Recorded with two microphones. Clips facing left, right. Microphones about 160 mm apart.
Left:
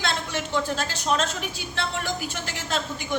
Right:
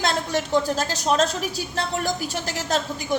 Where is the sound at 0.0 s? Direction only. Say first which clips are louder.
Right 5 dB; 40° right (ahead or behind).